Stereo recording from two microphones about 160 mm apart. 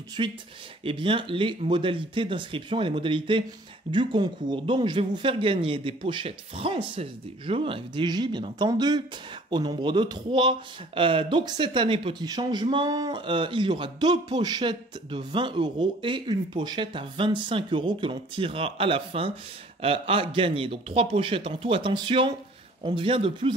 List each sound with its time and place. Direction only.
0.2 s speech: 35° right (ahead or behind)